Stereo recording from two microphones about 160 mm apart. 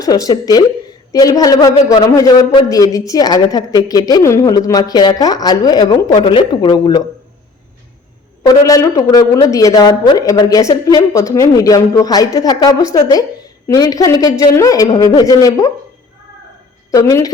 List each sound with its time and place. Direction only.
0.0 s a woman's voice: 25° left (ahead or behind)
8.6 s a woman's voice: 20° left (ahead or behind)
16.9 s a woman's voice: 20° left (ahead or behind)